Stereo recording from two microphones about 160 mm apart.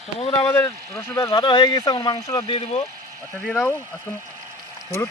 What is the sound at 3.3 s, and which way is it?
Speech, 5° left (ahead or behind).